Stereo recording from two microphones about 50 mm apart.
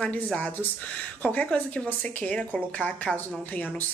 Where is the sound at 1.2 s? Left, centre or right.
Left.